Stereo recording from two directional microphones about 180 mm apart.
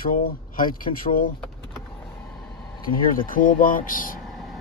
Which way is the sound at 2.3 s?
5° left (ahead or behind).